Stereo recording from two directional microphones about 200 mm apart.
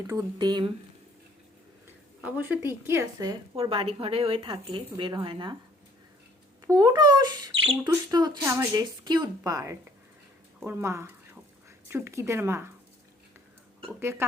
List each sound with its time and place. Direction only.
0.1 s speech: 15° right (ahead or behind)
2.2 s a woman's voice: 10° right (ahead or behind)
3.5 s speech: 30° right (ahead or behind)
6.7 s a woman's voice: 20° right (ahead or behind)
14.0 s a woman's voice: 10° right (ahead or behind)